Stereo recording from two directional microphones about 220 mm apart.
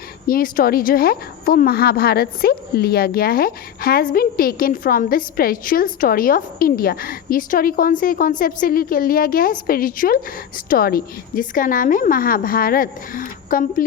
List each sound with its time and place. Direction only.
0.3 s a woman's voice: 40° left (ahead or behind)